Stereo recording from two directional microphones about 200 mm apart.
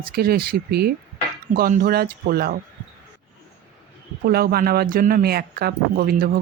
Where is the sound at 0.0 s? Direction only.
50° right (ahead or behind).